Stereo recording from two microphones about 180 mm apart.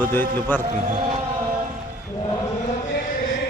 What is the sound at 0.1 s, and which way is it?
Speech, 10° left (ahead or behind).